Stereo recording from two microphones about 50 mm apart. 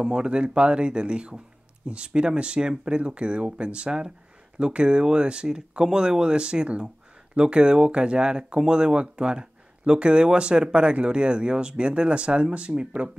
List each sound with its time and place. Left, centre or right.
0.0 s speech: centre